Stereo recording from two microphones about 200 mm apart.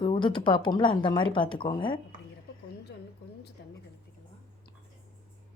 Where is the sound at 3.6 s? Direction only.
55° left (ahead or behind).